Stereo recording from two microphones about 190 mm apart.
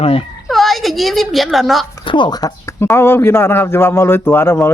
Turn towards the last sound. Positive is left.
turn(degrees=10)  # may be behind; listen again after turning